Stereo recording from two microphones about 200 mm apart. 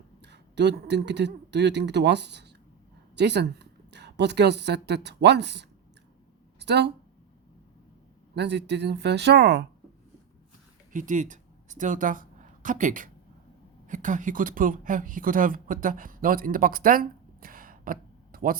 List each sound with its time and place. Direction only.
0.2 s speech: 60° right (ahead or behind)
8.4 s speech: 60° right (ahead or behind)
10.9 s speech: 40° right (ahead or behind)